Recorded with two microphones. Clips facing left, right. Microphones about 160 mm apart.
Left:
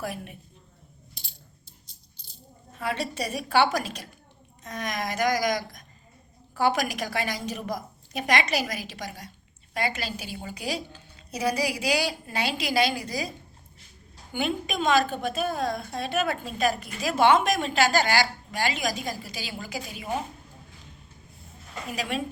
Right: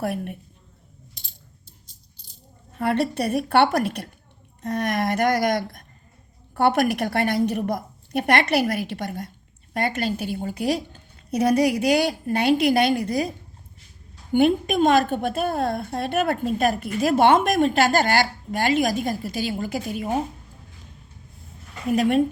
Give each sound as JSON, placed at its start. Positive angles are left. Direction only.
{"t": 0.0, "sound": "a woman's voice", "side_deg": -60}
{"t": 1.1, "sound": "coin", "side_deg": -20}
{"t": 2.7, "sound": "a woman's voice", "side_deg": -60}
{"t": 14.3, "sound": "a woman's voice", "side_deg": -55}
{"t": 21.8, "sound": "a woman's voice", "side_deg": -55}